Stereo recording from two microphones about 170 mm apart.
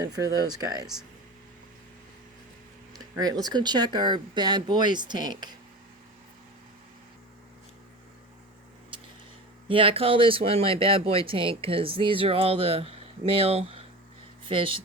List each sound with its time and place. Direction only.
0.4 s speech: 25° right (ahead or behind)
3.0 s speech: 20° right (ahead or behind)
8.9 s a sound: 30° right (ahead or behind)
9.6 s speech: 30° right (ahead or behind)